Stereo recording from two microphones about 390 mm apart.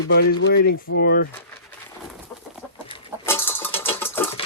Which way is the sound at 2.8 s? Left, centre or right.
Centre.